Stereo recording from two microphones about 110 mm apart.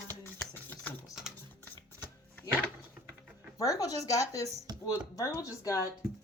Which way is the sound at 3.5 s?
30° left (ahead or behind).